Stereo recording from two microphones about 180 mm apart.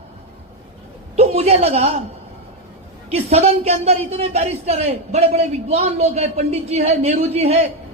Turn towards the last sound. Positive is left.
turn(degrees=-35)  # may be behind; listen again after turning